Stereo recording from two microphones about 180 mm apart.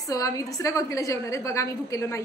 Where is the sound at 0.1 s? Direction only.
20° left (ahead or behind).